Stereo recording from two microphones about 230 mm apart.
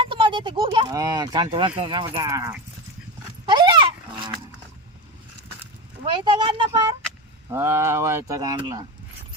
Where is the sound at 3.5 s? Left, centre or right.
Right.